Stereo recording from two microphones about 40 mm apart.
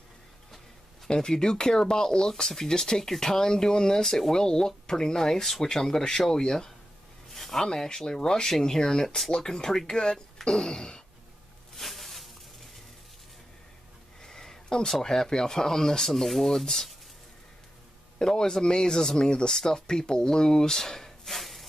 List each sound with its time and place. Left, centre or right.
1.0 s speech: centre
7.3 s a sound: centre
7.6 s speech: centre
11.7 s snake: centre
14.2 s a sound: centre
15.0 s speech: centre
18.2 s speech: centre